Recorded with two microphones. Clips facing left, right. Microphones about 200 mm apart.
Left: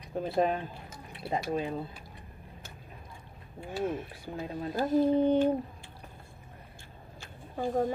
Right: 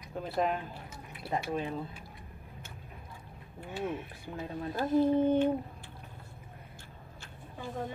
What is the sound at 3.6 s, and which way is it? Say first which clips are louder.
Speech: left 3 dB; 35° left (ahead or behind).